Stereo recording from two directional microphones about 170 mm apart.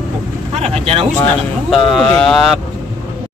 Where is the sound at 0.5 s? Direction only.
40° right (ahead or behind).